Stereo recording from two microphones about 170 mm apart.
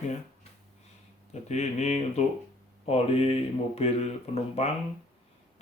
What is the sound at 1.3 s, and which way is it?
Speech, 40° left (ahead or behind).